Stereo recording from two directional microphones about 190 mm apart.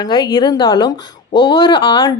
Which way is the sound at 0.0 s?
25° left (ahead or behind).